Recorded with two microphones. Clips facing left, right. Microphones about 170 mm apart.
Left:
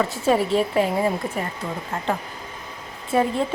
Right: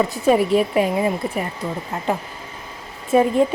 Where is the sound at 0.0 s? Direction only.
15° right (ahead or behind).